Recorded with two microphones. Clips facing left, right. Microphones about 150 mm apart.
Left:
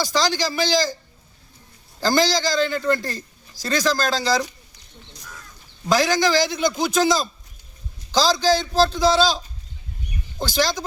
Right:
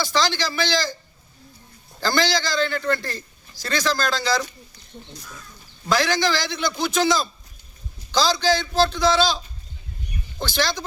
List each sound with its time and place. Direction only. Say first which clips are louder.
0.0 s speech: left 1 dB; 40° left (ahead or behind)
2.0 s speech: left 3 dB; 40° left (ahead or behind)
4.4 s a sound: left 2 dB; 15° left (ahead or behind)
5.9 s a man's voice: left 3 dB; 40° left (ahead or behind)
10.4 s speech: left 2 dB; 40° left (ahead or behind)